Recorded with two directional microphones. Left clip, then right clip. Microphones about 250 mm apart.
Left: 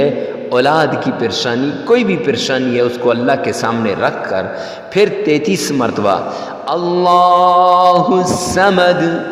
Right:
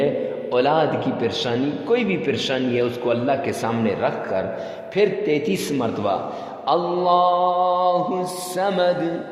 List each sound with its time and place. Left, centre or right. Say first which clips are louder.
0.5 s a man's voice: left 7 dB; left